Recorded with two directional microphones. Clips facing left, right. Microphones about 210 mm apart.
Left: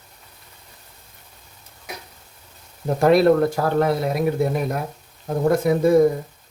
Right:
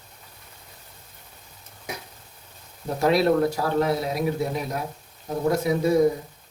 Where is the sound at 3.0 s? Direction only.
55° left (ahead or behind).